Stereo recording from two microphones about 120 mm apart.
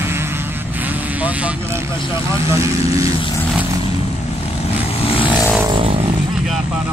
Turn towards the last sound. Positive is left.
turn(degrees=50)  # may be behind; listen again after turning